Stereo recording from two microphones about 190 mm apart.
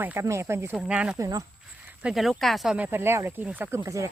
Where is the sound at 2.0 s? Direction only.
Centre (ahead or behind).